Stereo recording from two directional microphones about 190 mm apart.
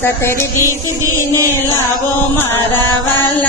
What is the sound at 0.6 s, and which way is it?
Music, 15° right (ahead or behind).